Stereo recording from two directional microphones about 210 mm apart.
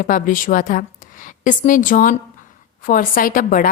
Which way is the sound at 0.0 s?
40° left (ahead or behind).